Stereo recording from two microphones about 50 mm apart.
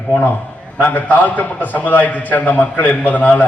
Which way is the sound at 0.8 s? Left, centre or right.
Left.